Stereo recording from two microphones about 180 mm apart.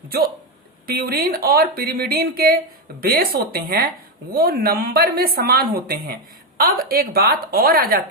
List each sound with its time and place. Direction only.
0.9 s a woman's voice: 55° right (ahead or behind)